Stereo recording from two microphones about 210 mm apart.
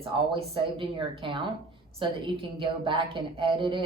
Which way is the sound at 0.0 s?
25° right (ahead or behind).